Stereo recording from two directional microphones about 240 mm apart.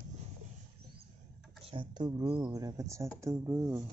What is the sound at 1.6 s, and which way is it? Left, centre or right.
Speech, right.